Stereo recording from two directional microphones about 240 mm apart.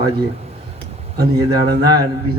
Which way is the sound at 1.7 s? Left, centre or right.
Centre.